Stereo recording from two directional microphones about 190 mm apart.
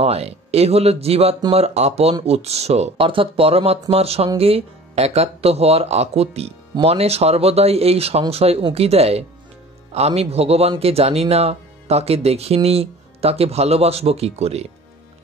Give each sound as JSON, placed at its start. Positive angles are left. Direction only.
{"t": 0.0, "sound": "speech", "side_deg": -30}